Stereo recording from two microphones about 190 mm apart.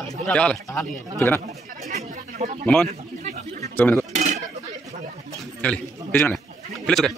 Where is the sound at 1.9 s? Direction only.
40° right (ahead or behind).